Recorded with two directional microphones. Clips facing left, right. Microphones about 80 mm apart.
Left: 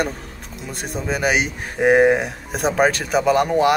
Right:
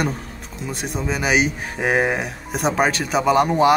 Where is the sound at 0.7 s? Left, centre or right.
Centre.